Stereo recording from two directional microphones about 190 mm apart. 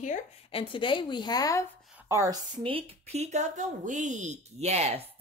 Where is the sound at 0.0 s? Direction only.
40° left (ahead or behind).